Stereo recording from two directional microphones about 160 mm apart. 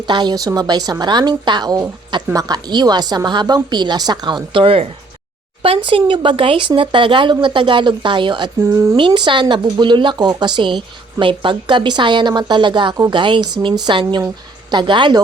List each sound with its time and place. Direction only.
0.0 s speech: 30° right (ahead or behind)
8.6 s speech: 20° right (ahead or behind)
9.0 s speech: 30° right (ahead or behind)